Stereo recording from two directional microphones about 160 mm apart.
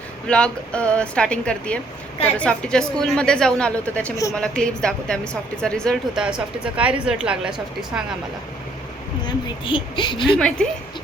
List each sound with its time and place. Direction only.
0.3 s speech: 5° left (ahead or behind)
6.2 s speech: 5° right (ahead or behind)
9.2 s a woman's voice: 30° left (ahead or behind)
10.3 s speech: 5° left (ahead or behind)